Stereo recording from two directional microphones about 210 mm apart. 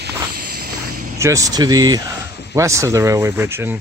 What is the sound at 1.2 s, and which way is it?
Speech, 15° right (ahead or behind).